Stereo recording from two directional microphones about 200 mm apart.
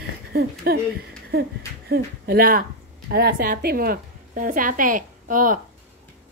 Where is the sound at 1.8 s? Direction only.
50° right (ahead or behind).